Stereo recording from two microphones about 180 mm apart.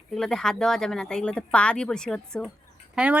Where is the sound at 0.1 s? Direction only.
Centre (ahead or behind).